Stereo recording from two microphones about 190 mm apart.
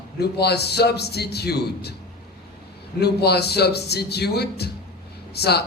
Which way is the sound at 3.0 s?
60° left (ahead or behind).